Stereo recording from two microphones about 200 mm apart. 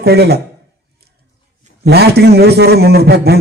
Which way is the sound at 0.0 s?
55° right (ahead or behind).